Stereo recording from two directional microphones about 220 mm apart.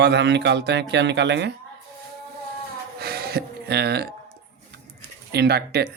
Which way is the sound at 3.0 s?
45° right (ahead or behind).